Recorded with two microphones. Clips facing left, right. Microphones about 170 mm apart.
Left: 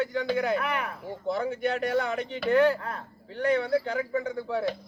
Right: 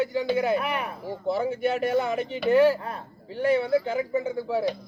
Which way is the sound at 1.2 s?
5° right (ahead or behind).